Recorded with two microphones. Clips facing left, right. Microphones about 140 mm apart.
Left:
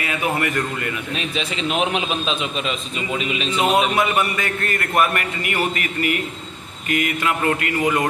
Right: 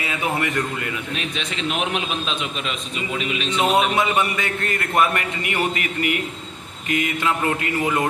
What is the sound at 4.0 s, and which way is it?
A man's voice, 20° right (ahead or behind).